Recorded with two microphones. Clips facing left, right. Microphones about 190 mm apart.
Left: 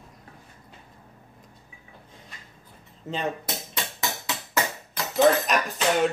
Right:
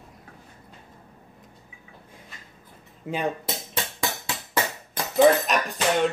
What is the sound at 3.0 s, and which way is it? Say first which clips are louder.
Speech: right 2 dB; 10° right (ahead or behind).